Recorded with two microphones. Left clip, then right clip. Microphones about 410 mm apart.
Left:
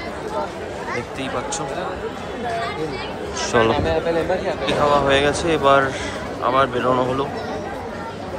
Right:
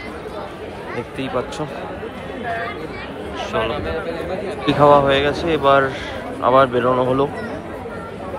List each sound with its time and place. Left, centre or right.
3.3 s speech: centre
3.7 s a man's voice: left
4.6 s speech: centre